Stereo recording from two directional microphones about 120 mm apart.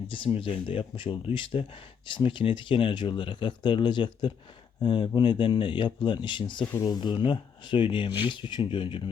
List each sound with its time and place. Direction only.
0.1 s speech: 45° left (ahead or behind)